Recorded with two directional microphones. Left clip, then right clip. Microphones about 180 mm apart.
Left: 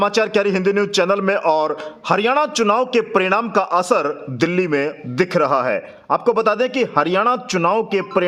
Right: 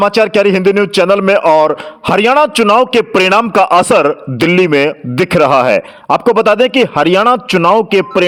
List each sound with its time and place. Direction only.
0.0 s a man's voice: 30° right (ahead or behind)